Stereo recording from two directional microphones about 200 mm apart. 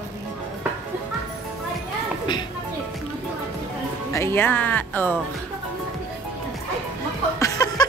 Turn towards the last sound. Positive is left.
turn(degrees=20)  # may be behind; listen again after turning